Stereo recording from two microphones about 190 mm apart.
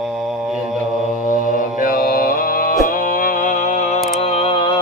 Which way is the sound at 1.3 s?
45° left (ahead or behind).